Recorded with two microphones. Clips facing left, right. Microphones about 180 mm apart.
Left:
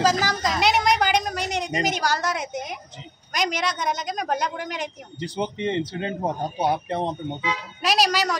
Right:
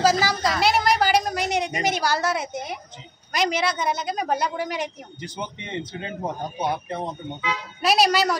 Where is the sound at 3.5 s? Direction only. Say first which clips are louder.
Right 2 dB; 5° right (ahead or behind).